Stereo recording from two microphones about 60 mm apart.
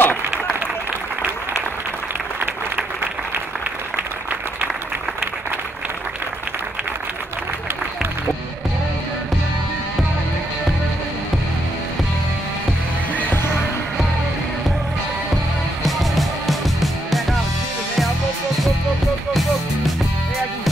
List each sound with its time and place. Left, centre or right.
0.0 s a sound: left
2.4 s applause: right
13.1 s music: left
15.8 s music: centre